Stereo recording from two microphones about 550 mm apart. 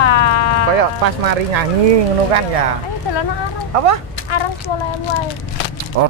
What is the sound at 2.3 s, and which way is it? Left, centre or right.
Speech, right.